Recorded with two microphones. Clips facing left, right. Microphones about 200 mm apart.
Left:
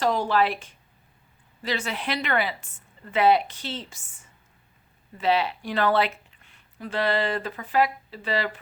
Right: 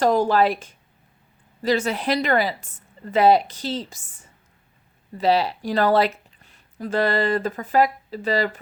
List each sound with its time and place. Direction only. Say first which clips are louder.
0.0 s a woman's voice: right 5 dB; 45° right (ahead or behind)